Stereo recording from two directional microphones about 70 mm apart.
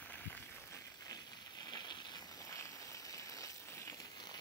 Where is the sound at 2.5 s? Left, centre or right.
Left.